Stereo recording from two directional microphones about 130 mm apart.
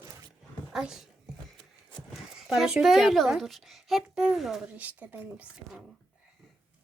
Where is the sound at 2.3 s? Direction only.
5° right (ahead or behind).